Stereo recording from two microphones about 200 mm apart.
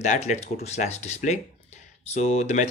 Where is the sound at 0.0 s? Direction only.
35° left (ahead or behind).